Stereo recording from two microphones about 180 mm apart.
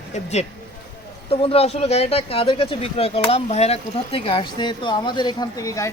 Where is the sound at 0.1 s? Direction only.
40° left (ahead or behind).